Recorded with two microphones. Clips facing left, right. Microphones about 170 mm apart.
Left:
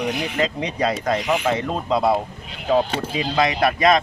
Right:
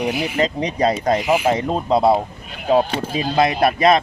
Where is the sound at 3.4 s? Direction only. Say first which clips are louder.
Right 3 dB; 30° right (ahead or behind).